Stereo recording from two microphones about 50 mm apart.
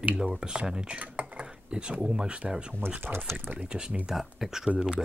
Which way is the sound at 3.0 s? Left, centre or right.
Right.